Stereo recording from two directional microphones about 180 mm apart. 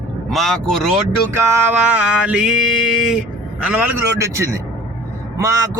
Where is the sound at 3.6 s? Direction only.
5° right (ahead or behind).